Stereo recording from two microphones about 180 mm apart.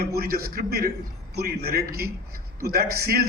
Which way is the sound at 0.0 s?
60° right (ahead or behind).